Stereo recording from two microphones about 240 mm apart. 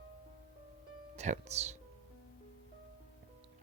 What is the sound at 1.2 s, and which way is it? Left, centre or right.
Speech, right.